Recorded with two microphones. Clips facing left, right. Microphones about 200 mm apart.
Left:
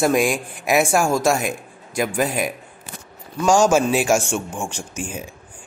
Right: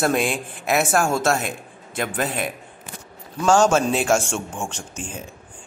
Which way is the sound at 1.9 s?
5° left (ahead or behind).